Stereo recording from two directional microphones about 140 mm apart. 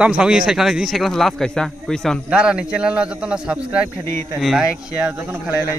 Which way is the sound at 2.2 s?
5° right (ahead or behind).